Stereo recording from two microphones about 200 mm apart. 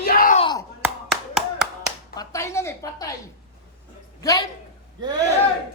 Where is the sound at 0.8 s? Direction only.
5° right (ahead or behind).